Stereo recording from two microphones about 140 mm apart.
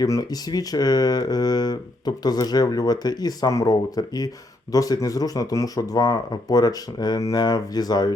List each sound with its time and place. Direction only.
0.0 s speech: 25° left (ahead or behind)